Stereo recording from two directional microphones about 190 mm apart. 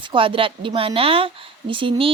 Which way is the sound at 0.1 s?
30° right (ahead or behind).